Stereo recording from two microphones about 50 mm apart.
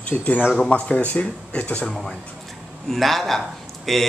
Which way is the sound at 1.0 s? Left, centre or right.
Left.